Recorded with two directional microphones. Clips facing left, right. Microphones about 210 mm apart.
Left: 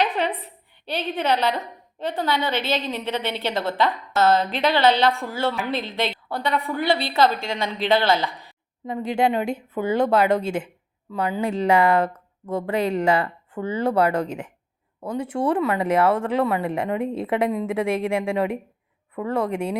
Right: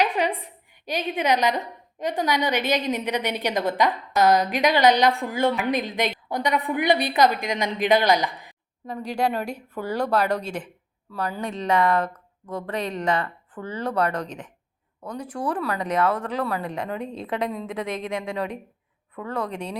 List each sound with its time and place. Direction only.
0.0 s a woman's voice: 10° right (ahead or behind)
9.0 s a woman's voice: 25° left (ahead or behind)